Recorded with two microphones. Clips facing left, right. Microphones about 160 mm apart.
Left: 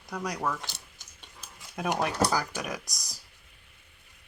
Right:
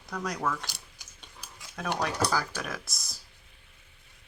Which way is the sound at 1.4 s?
15° left (ahead or behind).